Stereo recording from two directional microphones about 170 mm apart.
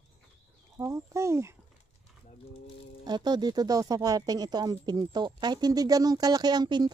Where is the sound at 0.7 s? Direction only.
20° right (ahead or behind).